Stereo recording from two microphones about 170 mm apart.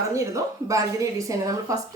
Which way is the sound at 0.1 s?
20° right (ahead or behind).